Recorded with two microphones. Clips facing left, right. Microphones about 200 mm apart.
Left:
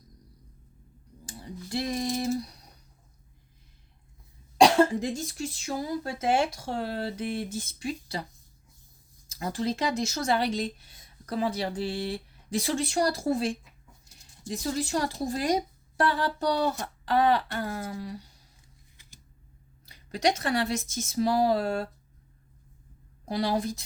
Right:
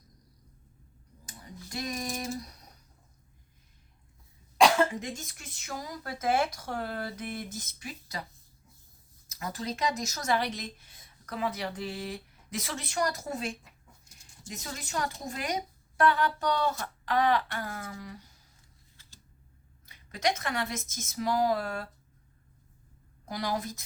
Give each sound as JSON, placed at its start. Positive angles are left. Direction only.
{"t": 1.2, "sound": "a sound", "side_deg": 30}
{"t": 4.5, "sound": "speech", "side_deg": 35}
{"t": 9.4, "sound": "speech", "side_deg": 30}
{"t": 19.8, "sound": "speech", "side_deg": 35}
{"t": 23.2, "sound": "speech", "side_deg": 30}